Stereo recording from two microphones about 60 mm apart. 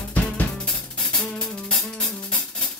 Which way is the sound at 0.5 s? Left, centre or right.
Centre.